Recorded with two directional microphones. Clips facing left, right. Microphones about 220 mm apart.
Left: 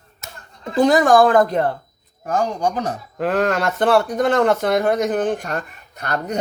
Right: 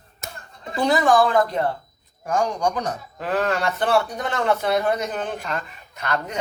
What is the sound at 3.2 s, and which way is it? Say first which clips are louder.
Speech: left 4 dB; 50° left (ahead or behind).